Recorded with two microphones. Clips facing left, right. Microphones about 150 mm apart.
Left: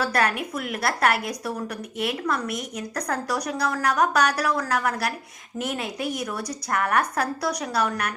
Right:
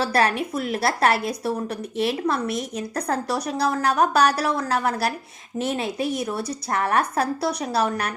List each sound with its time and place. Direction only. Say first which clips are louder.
0.0 s a woman's voice: right 3 dB; 30° right (ahead or behind)